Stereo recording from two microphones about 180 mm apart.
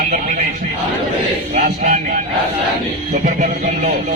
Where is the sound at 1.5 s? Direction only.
50° right (ahead or behind).